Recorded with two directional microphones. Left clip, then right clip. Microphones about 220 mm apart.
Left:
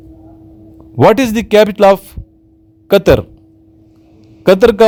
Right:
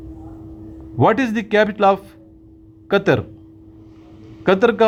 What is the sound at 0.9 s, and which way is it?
Speech, 50° left (ahead or behind).